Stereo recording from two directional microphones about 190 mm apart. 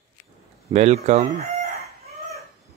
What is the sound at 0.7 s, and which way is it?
Speech, 35° right (ahead or behind).